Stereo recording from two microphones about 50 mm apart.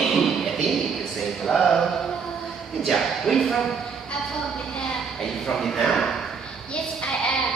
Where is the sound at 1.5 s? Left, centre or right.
Centre.